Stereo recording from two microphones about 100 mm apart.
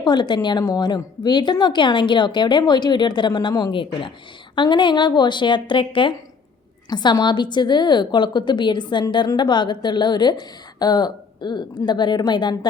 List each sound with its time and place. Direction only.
0.0 s a woman's voice: 45° left (ahead or behind)